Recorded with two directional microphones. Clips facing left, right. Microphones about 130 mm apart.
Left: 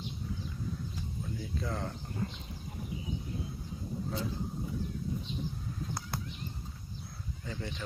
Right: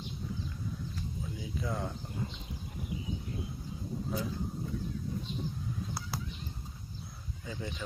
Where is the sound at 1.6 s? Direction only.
10° right (ahead or behind).